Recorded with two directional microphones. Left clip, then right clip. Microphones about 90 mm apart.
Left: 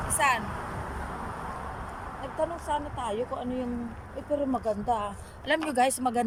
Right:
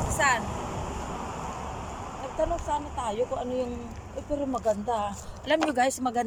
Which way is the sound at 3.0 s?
Centre (ahead or behind).